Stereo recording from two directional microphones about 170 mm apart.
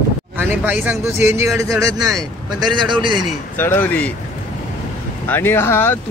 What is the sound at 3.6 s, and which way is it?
Speech, 10° left (ahead or behind).